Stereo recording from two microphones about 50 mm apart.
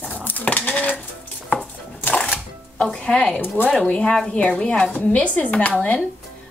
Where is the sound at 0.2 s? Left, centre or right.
Left.